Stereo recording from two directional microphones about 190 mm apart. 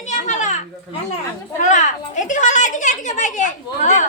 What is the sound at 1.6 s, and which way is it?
Speech, 40° left (ahead or behind).